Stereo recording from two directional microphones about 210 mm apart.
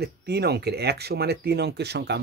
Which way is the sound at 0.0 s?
50° right (ahead or behind).